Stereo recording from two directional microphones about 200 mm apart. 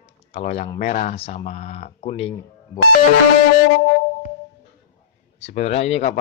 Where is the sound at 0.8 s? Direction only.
35° left (ahead or behind).